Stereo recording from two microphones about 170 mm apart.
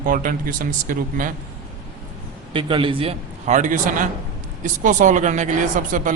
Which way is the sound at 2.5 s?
30° right (ahead or behind).